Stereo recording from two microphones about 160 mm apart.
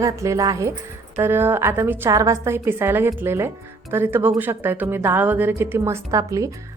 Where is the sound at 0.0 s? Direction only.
20° right (ahead or behind).